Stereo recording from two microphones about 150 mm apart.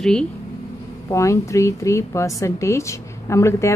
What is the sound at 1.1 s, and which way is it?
A woman's voice, 20° left (ahead or behind).